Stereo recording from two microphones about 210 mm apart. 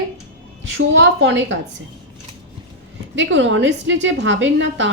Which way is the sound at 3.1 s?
60° right (ahead or behind).